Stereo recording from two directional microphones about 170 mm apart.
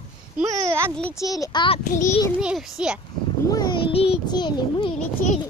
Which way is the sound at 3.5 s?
20° left (ahead or behind).